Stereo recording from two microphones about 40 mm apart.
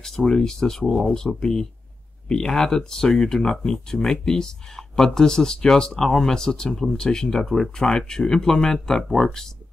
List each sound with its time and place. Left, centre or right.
0.0 s speech: centre